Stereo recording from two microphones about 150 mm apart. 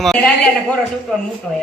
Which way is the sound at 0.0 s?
Centre (ahead or behind).